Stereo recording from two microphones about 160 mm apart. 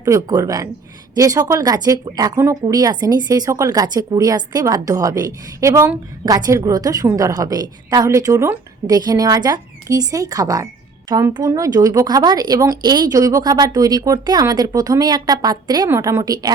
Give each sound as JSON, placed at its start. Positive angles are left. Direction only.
{"t": 0.0, "sound": "speech", "side_deg": -20}